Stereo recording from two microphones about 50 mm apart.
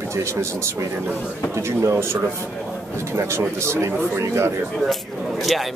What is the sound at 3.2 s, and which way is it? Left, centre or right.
Speech, right.